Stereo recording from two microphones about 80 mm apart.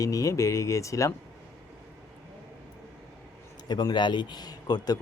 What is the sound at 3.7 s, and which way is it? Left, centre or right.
A man's voice, left.